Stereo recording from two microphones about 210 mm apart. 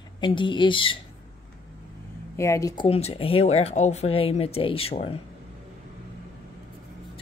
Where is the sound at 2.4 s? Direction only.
15° left (ahead or behind).